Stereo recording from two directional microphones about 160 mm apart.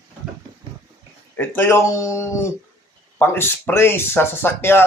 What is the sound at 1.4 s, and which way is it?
Speech, 15° left (ahead or behind).